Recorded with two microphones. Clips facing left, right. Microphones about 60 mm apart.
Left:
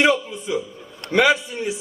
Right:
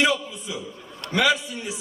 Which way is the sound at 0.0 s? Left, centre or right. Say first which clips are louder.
Left 4 dB; left.